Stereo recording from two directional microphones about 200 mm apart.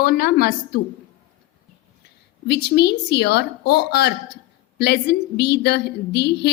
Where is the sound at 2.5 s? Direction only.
55° left (ahead or behind).